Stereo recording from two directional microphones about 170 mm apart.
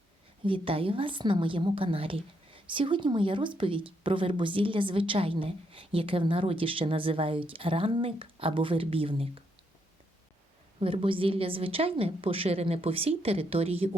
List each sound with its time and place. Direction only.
0.4 s a woman's voice: 30° right (ahead or behind)
10.8 s a woman's voice: 30° right (ahead or behind)